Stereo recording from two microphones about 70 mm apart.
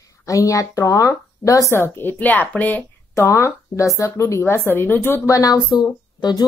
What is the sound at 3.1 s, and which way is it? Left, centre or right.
Speech, left.